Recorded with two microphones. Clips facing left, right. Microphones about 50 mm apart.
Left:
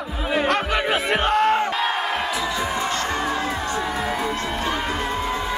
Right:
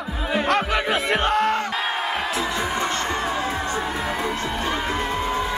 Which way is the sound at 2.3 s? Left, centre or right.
Right.